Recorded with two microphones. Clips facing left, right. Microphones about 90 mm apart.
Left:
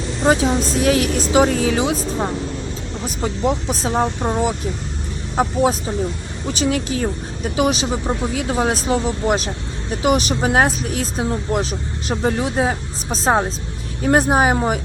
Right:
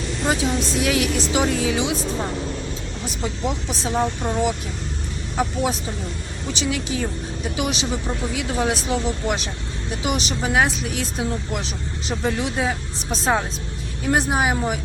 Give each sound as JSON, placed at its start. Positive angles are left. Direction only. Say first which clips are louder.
{"t": 0.3, "sound": "speech", "louder": "left 6 dB", "side_deg": 40}
{"t": 3.2, "sound": "speech", "louder": "left 6 dB", "side_deg": 45}